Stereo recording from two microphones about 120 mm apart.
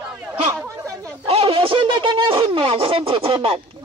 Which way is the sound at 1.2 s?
50° right (ahead or behind).